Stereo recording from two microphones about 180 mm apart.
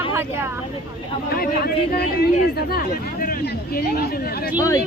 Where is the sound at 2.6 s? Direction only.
55° left (ahead or behind).